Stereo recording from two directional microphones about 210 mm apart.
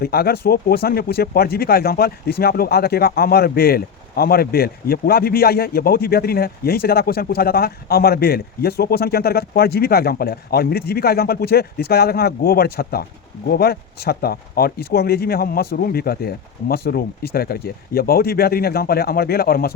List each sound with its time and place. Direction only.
0.0 s speech: 45° left (ahead or behind)